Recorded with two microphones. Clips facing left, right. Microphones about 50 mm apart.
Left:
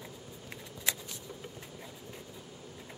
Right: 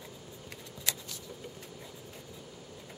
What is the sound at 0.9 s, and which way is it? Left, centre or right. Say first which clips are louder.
Shuffling cards: left 2 dB; centre.